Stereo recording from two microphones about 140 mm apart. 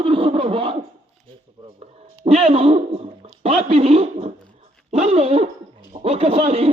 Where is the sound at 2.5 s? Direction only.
45° right (ahead or behind).